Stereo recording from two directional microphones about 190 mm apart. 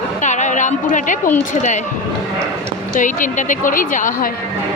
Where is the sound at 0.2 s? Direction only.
40° left (ahead or behind).